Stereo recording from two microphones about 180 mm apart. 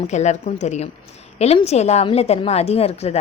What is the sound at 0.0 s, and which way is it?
A woman's voice, 40° left (ahead or behind).